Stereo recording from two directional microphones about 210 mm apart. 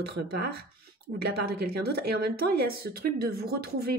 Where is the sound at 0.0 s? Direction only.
50° right (ahead or behind).